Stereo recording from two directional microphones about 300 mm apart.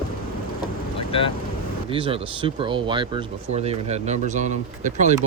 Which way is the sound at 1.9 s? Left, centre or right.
Centre.